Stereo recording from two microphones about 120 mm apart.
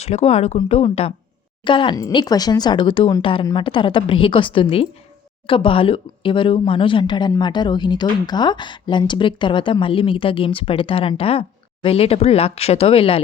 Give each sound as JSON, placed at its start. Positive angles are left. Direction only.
{"t": 0.0, "sound": "speech", "side_deg": 60}
{"t": 1.6, "sound": "speech", "side_deg": 45}
{"t": 2.1, "sound": "a woman's voice", "side_deg": 35}